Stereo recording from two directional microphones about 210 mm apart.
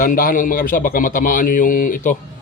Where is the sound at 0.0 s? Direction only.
40° left (ahead or behind).